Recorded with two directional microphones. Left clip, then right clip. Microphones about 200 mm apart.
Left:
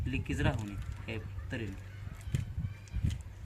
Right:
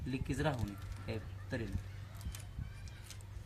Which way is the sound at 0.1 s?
Centre (ahead or behind).